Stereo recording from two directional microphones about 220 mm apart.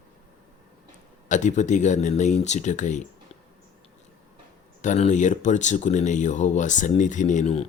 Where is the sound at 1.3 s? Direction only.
35° left (ahead or behind).